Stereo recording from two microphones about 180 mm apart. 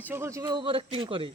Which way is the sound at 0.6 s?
30° right (ahead or behind).